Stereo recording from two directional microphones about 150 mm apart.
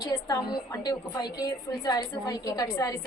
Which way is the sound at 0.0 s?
25° left (ahead or behind).